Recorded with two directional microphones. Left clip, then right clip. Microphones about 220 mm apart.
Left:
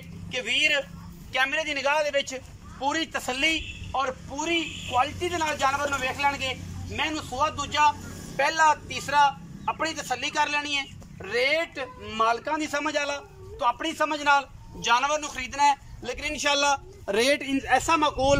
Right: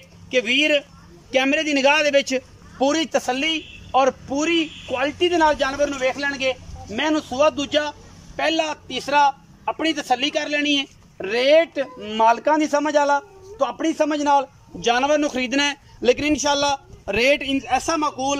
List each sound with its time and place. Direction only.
0.3 s a man's voice: 50° right (ahead or behind); by 16.8 s 20° right (ahead or behind)
17.0 s speech: 10° right (ahead or behind)